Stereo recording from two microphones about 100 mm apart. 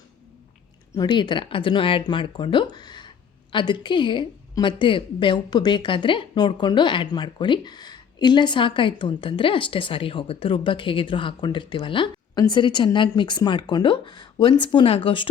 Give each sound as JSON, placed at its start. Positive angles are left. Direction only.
{"t": 0.9, "sound": "a woman's voice", "side_deg": 45}
{"t": 12.3, "sound": "speech", "side_deg": 45}